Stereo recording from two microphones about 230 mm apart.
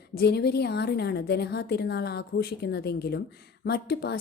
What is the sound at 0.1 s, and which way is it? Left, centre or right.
A woman's voice, left.